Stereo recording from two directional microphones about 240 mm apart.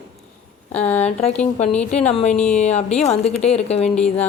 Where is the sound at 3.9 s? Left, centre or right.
Centre.